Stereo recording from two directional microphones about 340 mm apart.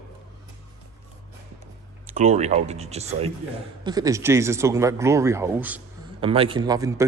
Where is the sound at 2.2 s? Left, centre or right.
Right; by 5.8 s centre.